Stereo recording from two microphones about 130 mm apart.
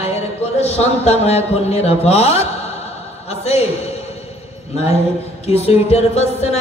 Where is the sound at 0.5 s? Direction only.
55° left (ahead or behind).